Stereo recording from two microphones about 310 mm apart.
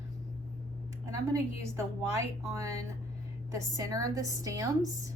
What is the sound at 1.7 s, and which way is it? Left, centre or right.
A woman's voice, centre.